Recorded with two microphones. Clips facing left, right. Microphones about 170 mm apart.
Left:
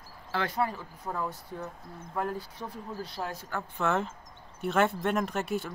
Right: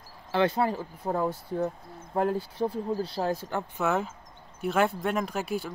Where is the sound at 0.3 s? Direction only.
25° right (ahead or behind).